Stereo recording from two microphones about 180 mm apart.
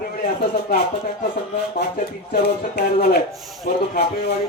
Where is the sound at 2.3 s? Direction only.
60° left (ahead or behind).